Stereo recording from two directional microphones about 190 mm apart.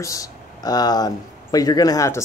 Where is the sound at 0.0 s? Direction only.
15° left (ahead or behind).